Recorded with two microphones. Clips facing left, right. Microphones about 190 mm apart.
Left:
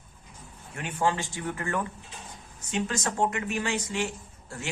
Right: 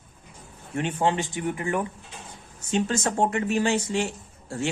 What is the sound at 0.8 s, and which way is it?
Speech, 25° right (ahead or behind).